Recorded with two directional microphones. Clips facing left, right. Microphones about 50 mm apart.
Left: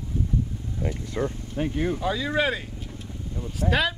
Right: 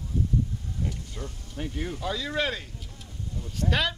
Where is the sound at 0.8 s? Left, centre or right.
Left.